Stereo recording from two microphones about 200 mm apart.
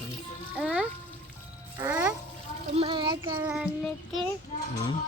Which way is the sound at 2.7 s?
25° right (ahead or behind).